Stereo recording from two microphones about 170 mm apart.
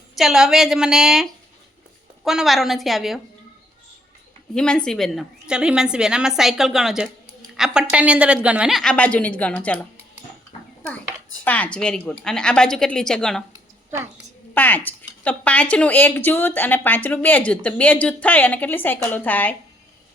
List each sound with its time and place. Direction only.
0.2 s a woman's voice: centre (ahead or behind)
4.5 s a woman's voice: 5° left (ahead or behind)
11.4 s a woman's voice: 10° left (ahead or behind)
13.5 s a sound: 15° right (ahead or behind)
14.5 s a woman's voice: 10° left (ahead or behind)